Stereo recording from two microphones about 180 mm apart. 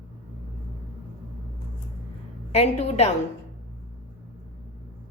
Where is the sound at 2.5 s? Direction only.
35° left (ahead or behind).